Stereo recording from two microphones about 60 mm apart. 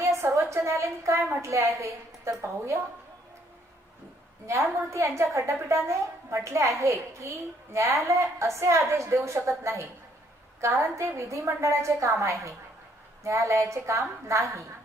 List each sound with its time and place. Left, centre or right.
0.0 s a sound: right
0.3 s a woman's voice: right
4.4 s a woman's voice: right